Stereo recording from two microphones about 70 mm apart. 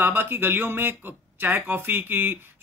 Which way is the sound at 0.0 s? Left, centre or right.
Right.